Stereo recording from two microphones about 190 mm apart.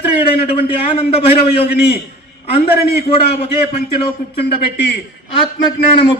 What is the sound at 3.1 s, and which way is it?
Speech, 30° left (ahead or behind).